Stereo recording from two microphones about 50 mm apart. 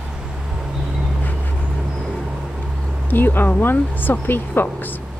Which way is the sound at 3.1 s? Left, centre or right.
Left.